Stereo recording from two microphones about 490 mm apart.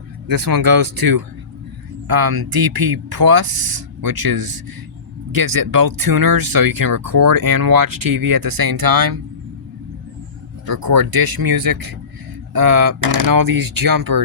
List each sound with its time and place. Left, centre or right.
0.3 s speech: right
10.7 s speech: right